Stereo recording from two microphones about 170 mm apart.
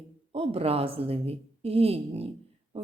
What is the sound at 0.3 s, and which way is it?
A woman's voice, 35° right (ahead or behind).